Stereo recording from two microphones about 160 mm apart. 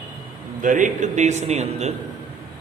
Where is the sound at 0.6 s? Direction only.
55° right (ahead or behind).